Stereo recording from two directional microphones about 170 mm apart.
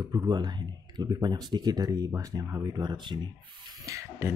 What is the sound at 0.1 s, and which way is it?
Speech, 20° right (ahead or behind).